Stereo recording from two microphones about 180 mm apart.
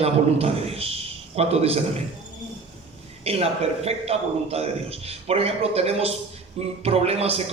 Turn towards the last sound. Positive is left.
turn(degrees=-35)  # may be behind; listen again after turning